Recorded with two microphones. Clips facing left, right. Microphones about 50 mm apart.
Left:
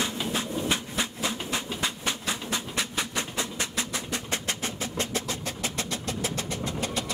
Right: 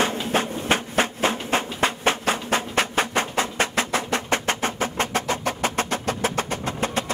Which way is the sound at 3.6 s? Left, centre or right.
Right.